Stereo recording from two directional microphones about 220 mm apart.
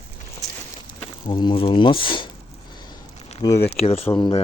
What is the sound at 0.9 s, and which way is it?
Speech, 20° left (ahead or behind).